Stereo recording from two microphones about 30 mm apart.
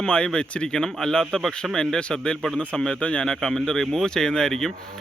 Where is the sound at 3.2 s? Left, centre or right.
Centre.